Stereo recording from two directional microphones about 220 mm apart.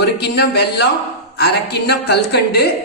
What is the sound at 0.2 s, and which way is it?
A woman's voice, 50° left (ahead or behind).